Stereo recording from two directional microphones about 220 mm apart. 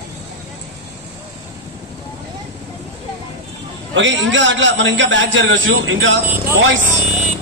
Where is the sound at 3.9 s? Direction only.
60° right (ahead or behind).